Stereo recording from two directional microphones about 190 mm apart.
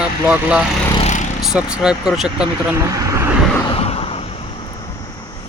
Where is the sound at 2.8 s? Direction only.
15° right (ahead or behind).